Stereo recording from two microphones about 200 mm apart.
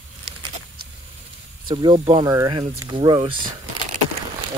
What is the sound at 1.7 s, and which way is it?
Speech, 25° right (ahead or behind).